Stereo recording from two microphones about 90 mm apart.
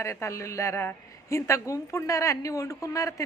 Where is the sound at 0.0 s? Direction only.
30° left (ahead or behind).